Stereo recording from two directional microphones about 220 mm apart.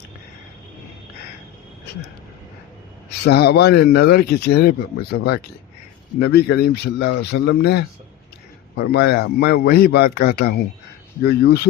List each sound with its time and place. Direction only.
3.2 s speech: 50° left (ahead or behind)